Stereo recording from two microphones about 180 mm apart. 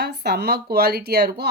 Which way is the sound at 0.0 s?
65° right (ahead or behind).